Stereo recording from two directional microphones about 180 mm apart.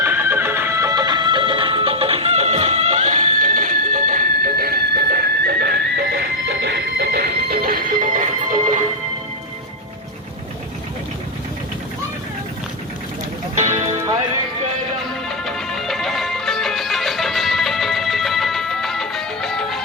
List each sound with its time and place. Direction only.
0.0 s music: 10° right (ahead or behind); by 8.8 s 45° right (ahead or behind)
13.6 s music: 40° right (ahead or behind)
15.3 s music: centre (ahead or behind)